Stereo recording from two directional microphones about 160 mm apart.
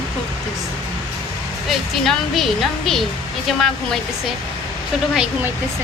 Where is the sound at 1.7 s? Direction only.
Centre (ahead or behind).